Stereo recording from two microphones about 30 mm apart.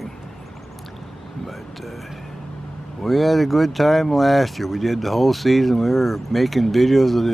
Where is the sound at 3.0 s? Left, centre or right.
Centre.